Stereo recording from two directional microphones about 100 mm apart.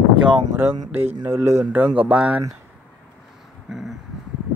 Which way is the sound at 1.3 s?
25° right (ahead or behind).